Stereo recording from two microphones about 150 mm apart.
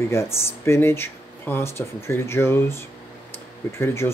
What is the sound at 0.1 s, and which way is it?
Speech, 15° left (ahead or behind).